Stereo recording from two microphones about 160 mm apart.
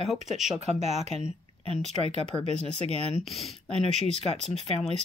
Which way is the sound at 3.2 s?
Centre (ahead or behind).